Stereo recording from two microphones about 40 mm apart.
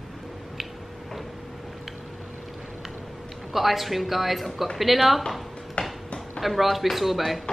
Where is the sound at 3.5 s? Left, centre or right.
Centre.